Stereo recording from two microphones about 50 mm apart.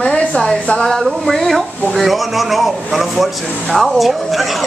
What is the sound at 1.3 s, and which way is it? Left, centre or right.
A man's voice, centre.